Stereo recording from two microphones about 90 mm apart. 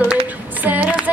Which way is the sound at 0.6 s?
20° right (ahead or behind).